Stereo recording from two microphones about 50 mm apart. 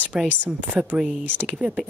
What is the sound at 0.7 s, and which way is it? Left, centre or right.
Speech, centre.